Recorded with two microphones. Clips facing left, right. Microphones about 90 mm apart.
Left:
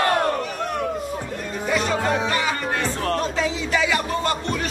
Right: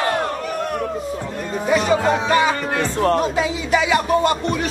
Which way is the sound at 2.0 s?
20° right (ahead or behind).